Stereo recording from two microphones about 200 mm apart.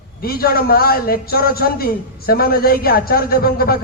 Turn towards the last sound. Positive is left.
turn(degrees=50)  # may be behind; listen again after turning